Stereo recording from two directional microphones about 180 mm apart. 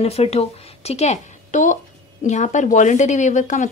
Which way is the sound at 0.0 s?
35° left (ahead or behind).